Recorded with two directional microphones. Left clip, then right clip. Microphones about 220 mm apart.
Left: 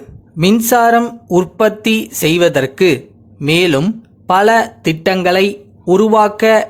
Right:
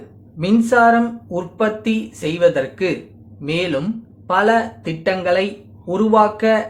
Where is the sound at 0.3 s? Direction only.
45° left (ahead or behind).